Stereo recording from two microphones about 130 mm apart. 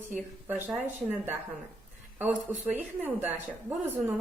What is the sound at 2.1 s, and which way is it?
A woman's voice, 15° right (ahead or behind).